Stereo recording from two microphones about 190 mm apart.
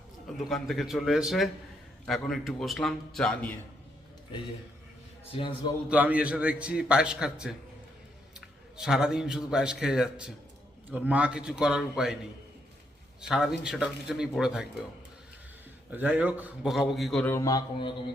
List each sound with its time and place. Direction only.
0.3 s speech: centre (ahead or behind)
5.3 s a man's voice: 25° left (ahead or behind)
5.9 s a man's voice: 5° right (ahead or behind)
13.2 s speech: 5° right (ahead or behind)
15.9 s a man's voice: 10° right (ahead or behind); by 17.9 s 20° left (ahead or behind)